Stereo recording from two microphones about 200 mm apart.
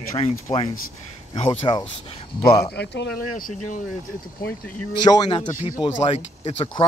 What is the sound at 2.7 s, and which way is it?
Speech, 60° left (ahead or behind).